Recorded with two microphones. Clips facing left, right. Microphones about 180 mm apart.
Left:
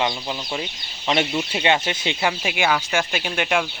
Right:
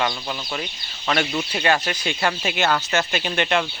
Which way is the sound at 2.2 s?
10° left (ahead or behind).